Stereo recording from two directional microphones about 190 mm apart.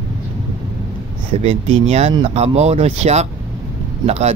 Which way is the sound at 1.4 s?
30° right (ahead or behind).